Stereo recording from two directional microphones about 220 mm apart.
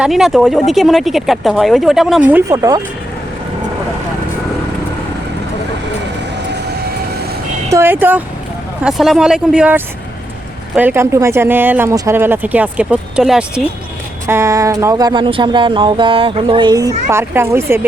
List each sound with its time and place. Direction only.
0.0 s speech: centre (ahead or behind); by 2.8 s 15° right (ahead or behind)
7.7 s speech: 10° right (ahead or behind)